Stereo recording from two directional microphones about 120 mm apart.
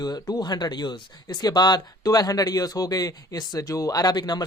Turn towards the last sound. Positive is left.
turn(degrees=35)  # may be behind; listen again after turning